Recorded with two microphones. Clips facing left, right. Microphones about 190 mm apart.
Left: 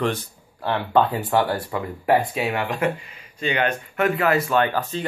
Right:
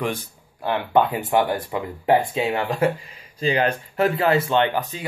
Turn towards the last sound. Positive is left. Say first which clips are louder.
# even
turn(degrees=-15)  # may be behind; listen again after turning